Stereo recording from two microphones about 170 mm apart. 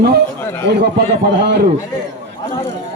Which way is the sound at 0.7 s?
80° right.